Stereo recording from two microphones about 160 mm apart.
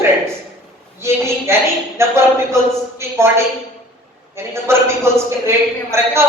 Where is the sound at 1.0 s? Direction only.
15° right (ahead or behind).